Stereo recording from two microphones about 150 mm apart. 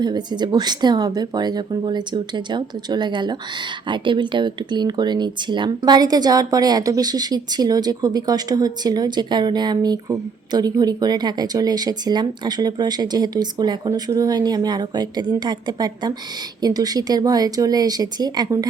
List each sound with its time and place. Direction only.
0.0 s speech: 30° right (ahead or behind)